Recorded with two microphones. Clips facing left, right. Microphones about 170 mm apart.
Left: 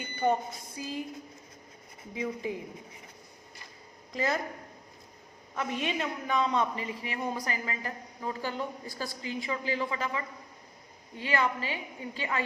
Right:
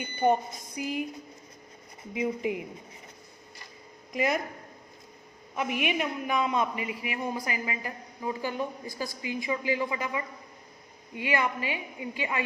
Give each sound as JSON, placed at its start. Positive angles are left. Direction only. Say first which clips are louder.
{"t": 0.0, "sound": "a sound", "louder": "right 3 dB", "side_deg": -20}
{"t": 0.8, "sound": "a man's voice", "louder": "right 5 dB", "side_deg": -15}
{"t": 2.1, "sound": "a man's voice", "louder": "right 4 dB", "side_deg": -15}
{"t": 4.1, "sound": "a man's voice", "louder": "right 3 dB", "side_deg": -15}
{"t": 5.8, "sound": "a man's voice", "louder": "right 3 dB", "side_deg": -15}